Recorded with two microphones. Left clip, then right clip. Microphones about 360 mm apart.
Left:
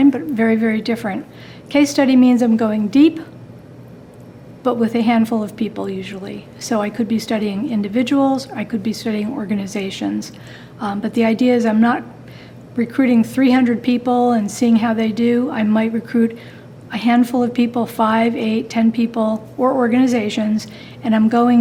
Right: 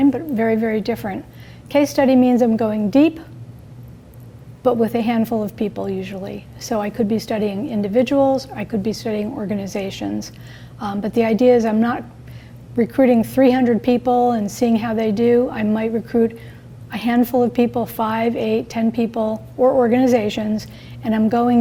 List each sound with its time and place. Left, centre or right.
0.0 s a woman's voice: right
4.6 s speech: right